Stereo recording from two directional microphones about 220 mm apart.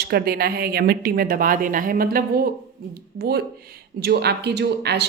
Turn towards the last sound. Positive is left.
turn(degrees=-50)  # may be behind; listen again after turning